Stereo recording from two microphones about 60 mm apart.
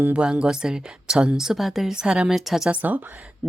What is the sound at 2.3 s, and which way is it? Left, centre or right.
Speech, centre.